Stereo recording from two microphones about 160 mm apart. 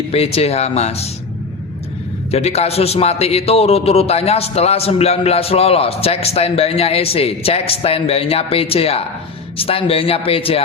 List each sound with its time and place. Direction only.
0.1 s a man's voice: 40° left (ahead or behind)
2.3 s a man's voice: 40° left (ahead or behind)